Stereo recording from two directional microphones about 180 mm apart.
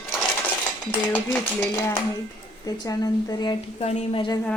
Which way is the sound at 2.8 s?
20° left (ahead or behind).